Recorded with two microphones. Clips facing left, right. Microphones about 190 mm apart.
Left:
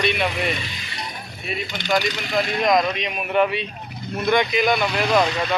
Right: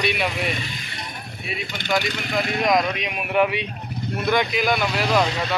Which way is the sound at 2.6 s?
10° right (ahead or behind).